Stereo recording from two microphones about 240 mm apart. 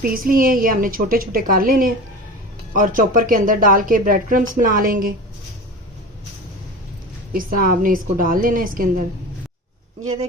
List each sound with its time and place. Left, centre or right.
0.0 s a woman's voice: right
7.3 s a woman's voice: right